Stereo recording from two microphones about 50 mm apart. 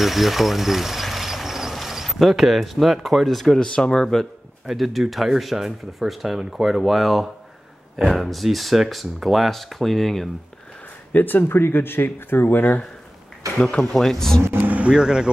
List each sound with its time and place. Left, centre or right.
0.0 s a sound: centre
2.0 s speech: centre
3.5 s speech: centre
4.6 s speech: centre
11.1 s speech: left
13.6 s speech: centre
13.9 s speech: centre
14.6 s vehicle: right
14.9 s speech: centre